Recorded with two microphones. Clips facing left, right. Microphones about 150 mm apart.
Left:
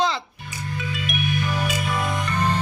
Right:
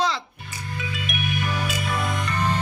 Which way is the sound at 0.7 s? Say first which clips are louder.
Left 2 dB; centre (ahead or behind).